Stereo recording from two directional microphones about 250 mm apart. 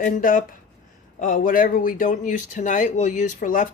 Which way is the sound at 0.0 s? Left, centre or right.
Left.